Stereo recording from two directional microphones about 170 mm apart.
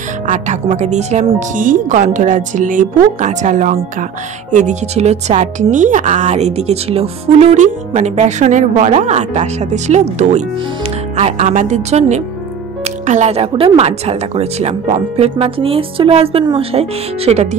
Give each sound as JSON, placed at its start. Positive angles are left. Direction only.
{"t": 0.3, "sound": "a woman's voice", "side_deg": -45}